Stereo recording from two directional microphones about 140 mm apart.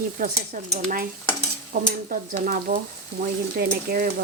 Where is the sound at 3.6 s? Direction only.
90° right.